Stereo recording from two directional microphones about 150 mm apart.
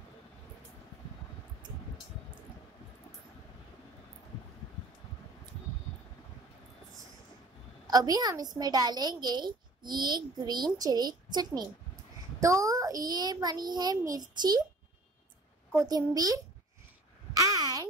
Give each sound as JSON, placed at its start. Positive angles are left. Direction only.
{"t": 7.8, "sound": "a child's voice", "side_deg": -25}
{"t": 15.7, "sound": "a child's voice", "side_deg": -20}
{"t": 17.3, "sound": "a sound", "side_deg": -25}